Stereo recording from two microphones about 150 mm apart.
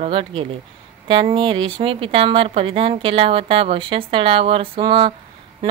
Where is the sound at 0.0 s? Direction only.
35° right (ahead or behind).